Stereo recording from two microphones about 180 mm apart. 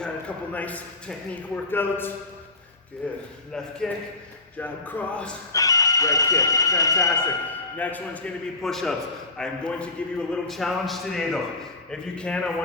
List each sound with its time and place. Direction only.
0.0 s a man's voice: 5° left (ahead or behind)
5.5 s a man's voice: 20° left (ahead or behind)